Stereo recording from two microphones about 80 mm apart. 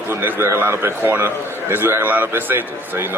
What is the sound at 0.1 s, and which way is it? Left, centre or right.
A man's voice, right.